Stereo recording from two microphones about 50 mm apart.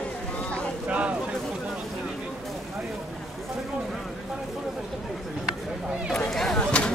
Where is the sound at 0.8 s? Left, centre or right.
Right.